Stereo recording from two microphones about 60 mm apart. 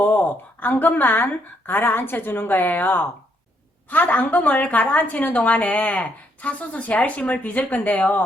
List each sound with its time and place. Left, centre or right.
0.0 s a woman's voice: left